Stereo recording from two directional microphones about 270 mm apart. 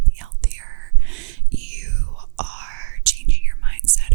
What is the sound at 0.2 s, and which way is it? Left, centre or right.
Whispering, right.